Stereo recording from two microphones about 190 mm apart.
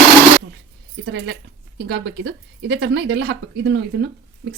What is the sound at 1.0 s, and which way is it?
Speech, 60° right (ahead or behind).